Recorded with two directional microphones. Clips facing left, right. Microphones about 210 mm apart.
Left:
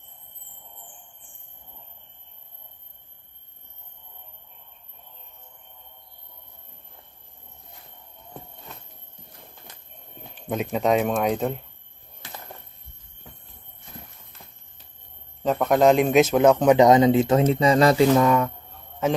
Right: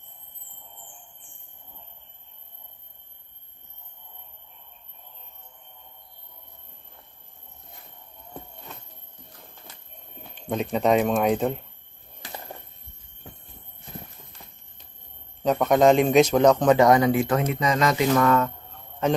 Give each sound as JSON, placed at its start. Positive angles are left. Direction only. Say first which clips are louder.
{"t": 10.4, "sound": "speech", "louder": "even", "side_deg": 5}
{"t": 15.4, "sound": "a man's voice", "louder": "even", "side_deg": 0}
{"t": 18.1, "sound": "a man's voice", "louder": "left 2 dB", "side_deg": 15}